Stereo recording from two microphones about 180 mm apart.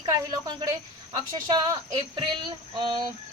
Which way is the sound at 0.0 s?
25° right (ahead or behind).